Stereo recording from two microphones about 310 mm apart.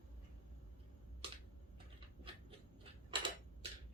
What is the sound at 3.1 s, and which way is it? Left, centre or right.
Typewriter, centre.